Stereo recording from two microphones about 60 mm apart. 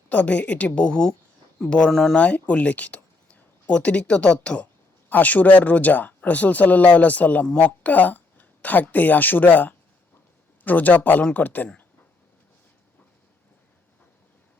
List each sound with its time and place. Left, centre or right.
0.1 s a woman's voice: left; by 2.1 s centre
2.1 s a woman's voice: left